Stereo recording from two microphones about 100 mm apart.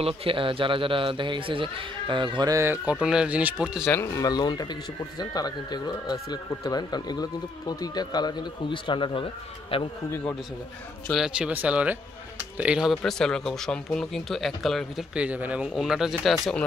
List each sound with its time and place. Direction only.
0.0 s speech: 65° right (ahead or behind)
2.5 s speech: 20° right (ahead or behind)
3.8 s speech: 20° left (ahead or behind)
4.1 s a man's voice: 40° left (ahead or behind); by 9.8 s 65° left (ahead or behind)
11.1 s speech: 10° right (ahead or behind)
12.9 s speech: 5° left (ahead or behind)
15.1 s speech: 15° right (ahead or behind)